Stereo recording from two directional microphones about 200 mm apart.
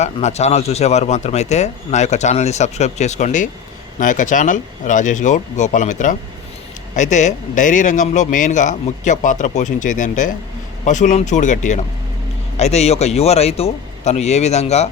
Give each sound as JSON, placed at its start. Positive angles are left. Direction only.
{"t": 0.0, "sound": "speech", "side_deg": 35}